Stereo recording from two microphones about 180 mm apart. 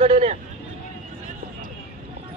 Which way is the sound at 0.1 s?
40° right (ahead or behind).